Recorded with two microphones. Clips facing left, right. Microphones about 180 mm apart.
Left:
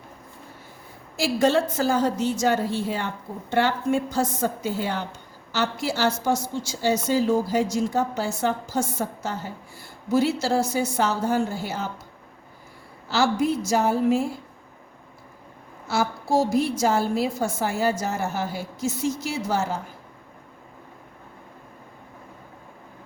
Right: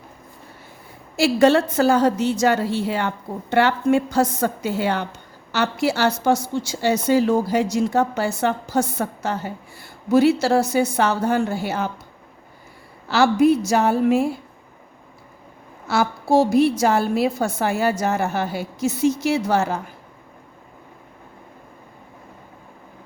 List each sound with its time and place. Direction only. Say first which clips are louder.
1.1 s a woman's voice: right 5 dB; 70° right (ahead or behind)
13.1 s a woman's voice: right 6 dB; 65° right (ahead or behind)
15.9 s a woman's voice: right 4 dB; 65° right (ahead or behind)